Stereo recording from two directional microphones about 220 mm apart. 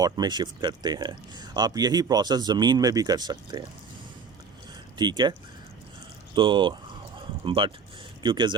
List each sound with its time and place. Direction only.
0.0 s speech: 20° right (ahead or behind)
4.9 s speech: 20° right (ahead or behind)
6.3 s speech: 20° right (ahead or behind)